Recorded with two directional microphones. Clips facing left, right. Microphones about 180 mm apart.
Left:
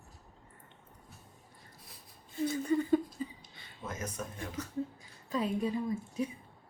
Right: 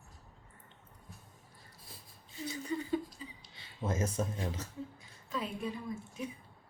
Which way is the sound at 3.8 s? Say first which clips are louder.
Right 6 dB; 25° right (ahead or behind).